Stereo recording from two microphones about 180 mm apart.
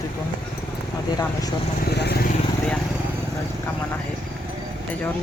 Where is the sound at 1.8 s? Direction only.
65° left (ahead or behind).